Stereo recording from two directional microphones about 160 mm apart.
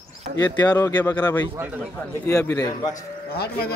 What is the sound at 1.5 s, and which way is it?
Speech, 10° right (ahead or behind).